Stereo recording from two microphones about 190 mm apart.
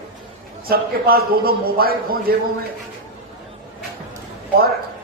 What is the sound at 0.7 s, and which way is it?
A man's voice, 55° right (ahead or behind).